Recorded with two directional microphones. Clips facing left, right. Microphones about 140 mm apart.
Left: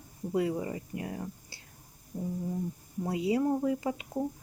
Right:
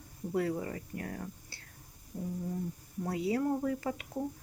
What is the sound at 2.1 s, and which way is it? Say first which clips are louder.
Brass instrument: left 3 dB; 25° left (ahead or behind).